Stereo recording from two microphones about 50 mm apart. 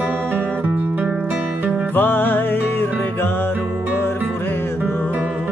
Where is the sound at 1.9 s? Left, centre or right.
Left.